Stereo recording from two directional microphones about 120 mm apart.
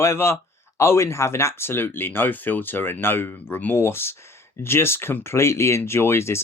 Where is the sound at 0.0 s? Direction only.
20° left (ahead or behind).